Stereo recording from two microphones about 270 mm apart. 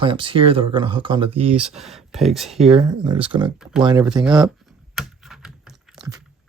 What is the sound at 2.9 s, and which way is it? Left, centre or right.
Speech, centre.